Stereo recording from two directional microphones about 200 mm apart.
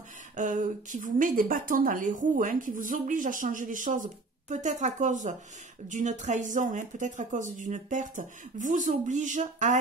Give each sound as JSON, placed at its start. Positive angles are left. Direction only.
{"t": 0.4, "sound": "a woman's voice", "side_deg": -40}